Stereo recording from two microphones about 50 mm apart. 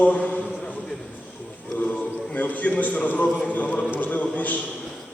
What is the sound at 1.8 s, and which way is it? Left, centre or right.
A man's voice, left.